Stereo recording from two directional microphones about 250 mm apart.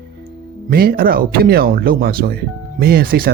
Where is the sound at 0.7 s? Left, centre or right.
Right.